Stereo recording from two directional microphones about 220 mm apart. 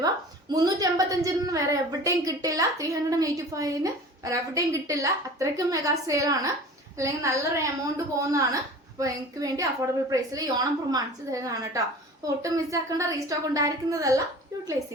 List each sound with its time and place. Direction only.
0.0 s a woman's voice: 15° right (ahead or behind)